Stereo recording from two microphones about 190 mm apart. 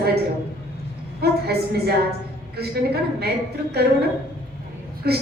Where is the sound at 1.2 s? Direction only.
55° right (ahead or behind).